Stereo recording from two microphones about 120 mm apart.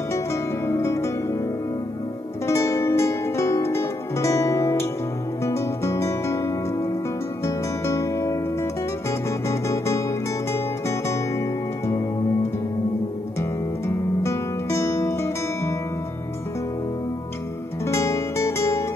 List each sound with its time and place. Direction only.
0.1 s music: 25° left (ahead or behind)
2.4 s music: 25° left (ahead or behind)
9.5 s music: 25° left (ahead or behind)
13.4 s music: 20° left (ahead or behind)
17.8 s music: 25° left (ahead or behind)